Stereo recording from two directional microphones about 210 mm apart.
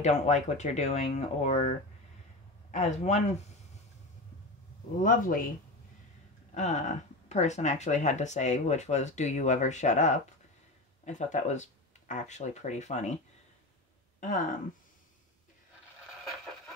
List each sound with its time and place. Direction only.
0.0 s speech: 35° left (ahead or behind)
5.0 s speech: 40° left (ahead or behind)
6.5 s speech: 35° left (ahead or behind)
14.2 s speech: 40° left (ahead or behind)